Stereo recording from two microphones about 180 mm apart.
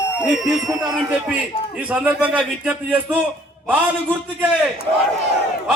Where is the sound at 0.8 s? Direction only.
5° right (ahead or behind).